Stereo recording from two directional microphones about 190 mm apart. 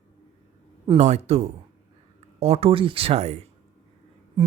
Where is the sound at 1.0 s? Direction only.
35° right (ahead or behind).